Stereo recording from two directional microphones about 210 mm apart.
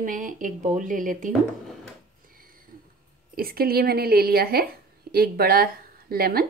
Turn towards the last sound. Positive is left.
turn(degrees=-45)  # may be behind; listen again after turning